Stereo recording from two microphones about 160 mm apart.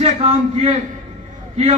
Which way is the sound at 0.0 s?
40° right (ahead or behind).